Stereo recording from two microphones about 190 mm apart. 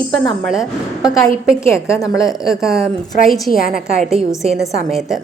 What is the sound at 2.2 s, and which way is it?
Speech, centre (ahead or behind).